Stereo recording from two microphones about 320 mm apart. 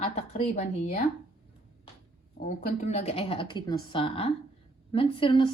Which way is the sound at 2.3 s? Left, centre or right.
Left.